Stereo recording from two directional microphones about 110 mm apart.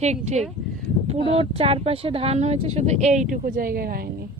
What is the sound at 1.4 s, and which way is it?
Speech, 65° right (ahead or behind).